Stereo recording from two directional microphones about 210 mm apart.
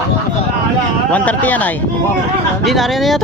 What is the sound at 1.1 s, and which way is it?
Speech, 5° left (ahead or behind).